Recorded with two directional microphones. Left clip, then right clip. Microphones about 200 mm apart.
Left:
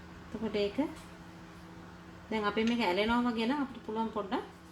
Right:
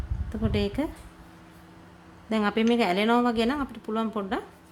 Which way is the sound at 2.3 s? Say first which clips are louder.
Right 7 dB; 45° right (ahead or behind).